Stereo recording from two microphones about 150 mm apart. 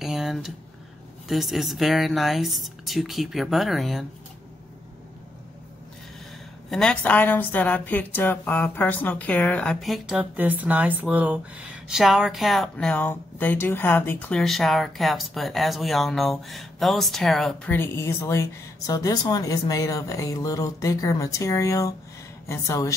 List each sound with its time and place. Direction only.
0.0 s a sound: centre (ahead or behind)
1.3 s a woman's voice: centre (ahead or behind)
6.7 s a woman's voice: 5° left (ahead or behind)
17.6 s a woman's voice: 15° left (ahead or behind)